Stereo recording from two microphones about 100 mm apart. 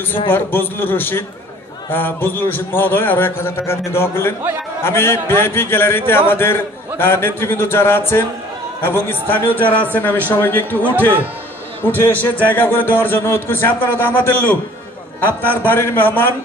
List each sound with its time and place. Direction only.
0.3 s a man's voice: 20° left (ahead or behind)